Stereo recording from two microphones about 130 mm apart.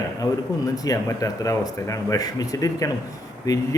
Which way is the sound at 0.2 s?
25° left (ahead or behind).